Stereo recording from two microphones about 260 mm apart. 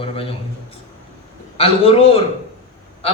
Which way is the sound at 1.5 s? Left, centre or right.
Left.